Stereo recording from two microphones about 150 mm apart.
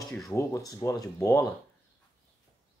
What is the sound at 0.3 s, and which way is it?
Speech, 20° left (ahead or behind).